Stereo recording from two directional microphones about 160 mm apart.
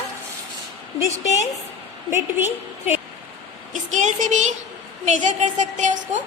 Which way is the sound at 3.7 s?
50° right (ahead or behind).